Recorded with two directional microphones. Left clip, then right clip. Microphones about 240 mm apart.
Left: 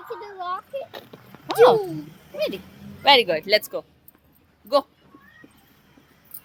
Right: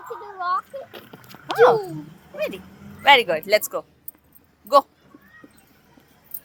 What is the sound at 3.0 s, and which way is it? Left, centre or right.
Speech, centre.